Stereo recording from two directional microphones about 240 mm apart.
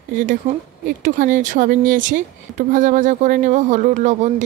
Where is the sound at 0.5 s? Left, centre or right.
Right.